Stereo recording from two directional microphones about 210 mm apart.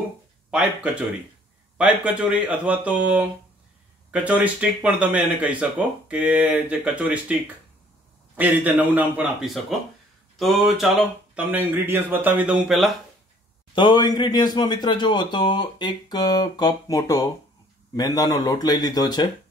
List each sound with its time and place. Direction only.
0.5 s speech: 5° right (ahead or behind)
8.4 s speech: 10° right (ahead or behind)
13.7 s speech: 20° left (ahead or behind)